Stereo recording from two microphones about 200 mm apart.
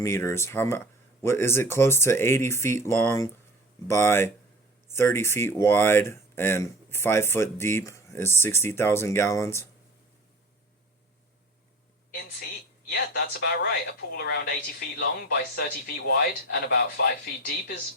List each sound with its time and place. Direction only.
0.0 s speech: 15° left (ahead or behind)
12.9 s speech: 50° left (ahead or behind)